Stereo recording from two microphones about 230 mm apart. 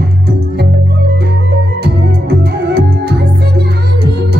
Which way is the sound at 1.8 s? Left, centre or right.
Right.